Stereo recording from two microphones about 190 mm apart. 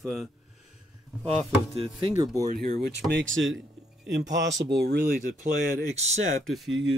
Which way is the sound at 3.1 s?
90° right.